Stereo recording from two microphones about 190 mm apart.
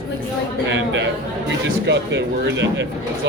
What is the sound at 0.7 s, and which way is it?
Speech, 70° right (ahead or behind).